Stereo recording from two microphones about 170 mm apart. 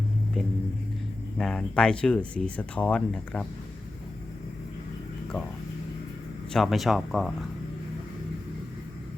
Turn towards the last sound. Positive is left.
turn(degrees=0)  # may be behind; listen again after turning